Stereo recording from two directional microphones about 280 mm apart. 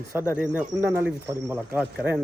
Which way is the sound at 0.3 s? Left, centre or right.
Centre.